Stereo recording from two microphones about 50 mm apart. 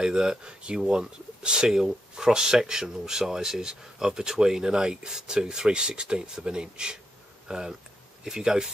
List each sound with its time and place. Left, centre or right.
0.0 s speech: centre